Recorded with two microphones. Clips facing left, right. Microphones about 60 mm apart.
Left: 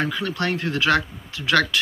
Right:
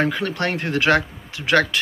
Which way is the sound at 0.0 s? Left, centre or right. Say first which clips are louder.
Right 3 dB; right.